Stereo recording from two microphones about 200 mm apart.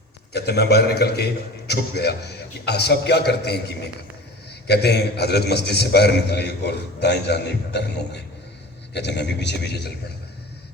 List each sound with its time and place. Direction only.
0.3 s a man's voice: 55° left (ahead or behind)